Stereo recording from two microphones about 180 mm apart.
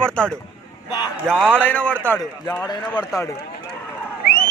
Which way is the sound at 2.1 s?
20° left (ahead or behind).